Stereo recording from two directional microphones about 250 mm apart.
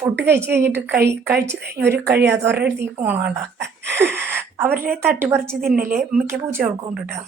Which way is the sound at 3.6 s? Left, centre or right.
Right.